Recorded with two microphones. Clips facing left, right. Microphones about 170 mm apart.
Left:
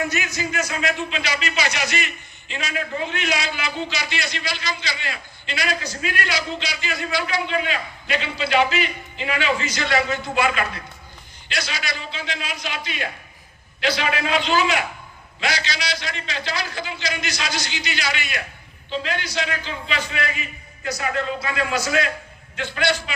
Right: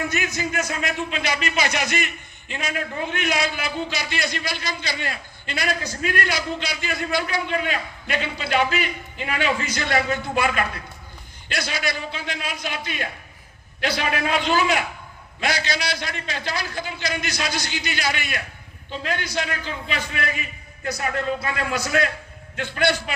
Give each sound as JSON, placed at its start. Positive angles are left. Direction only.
{"t": 0.1, "sound": "a man's voice", "side_deg": -55}
{"t": 21.4, "sound": "a man's voice", "side_deg": -55}